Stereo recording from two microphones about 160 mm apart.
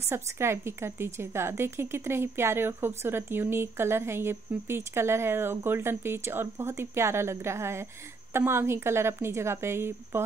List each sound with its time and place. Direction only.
0.0 s a woman's voice: 15° right (ahead or behind)